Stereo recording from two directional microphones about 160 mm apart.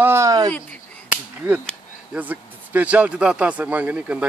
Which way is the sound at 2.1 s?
10° right (ahead or behind).